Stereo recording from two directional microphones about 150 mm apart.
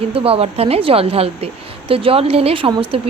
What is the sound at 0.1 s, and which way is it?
Speech, 40° right (ahead or behind).